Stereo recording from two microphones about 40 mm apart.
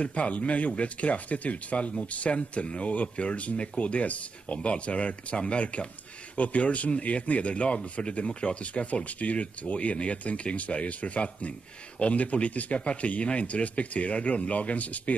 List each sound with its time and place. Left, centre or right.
0.0 s speech: left